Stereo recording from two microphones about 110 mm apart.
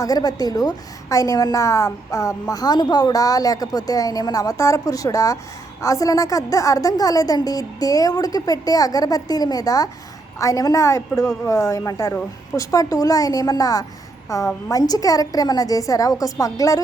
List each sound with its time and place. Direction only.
0.0 s a woman's voice: 35° left (ahead or behind)